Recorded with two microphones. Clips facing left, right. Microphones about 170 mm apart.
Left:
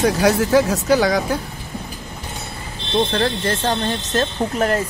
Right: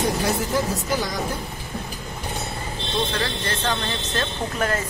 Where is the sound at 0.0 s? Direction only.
85° left.